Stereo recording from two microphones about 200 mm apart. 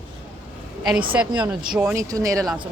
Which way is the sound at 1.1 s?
5° right (ahead or behind).